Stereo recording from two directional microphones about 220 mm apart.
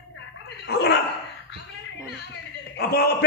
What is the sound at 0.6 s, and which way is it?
Speech, 50° left (ahead or behind).